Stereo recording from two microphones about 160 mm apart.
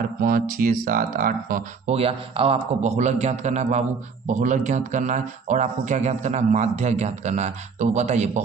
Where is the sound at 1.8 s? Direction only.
40° right (ahead or behind).